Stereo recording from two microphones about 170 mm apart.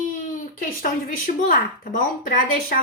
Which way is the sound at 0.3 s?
50° left (ahead or behind).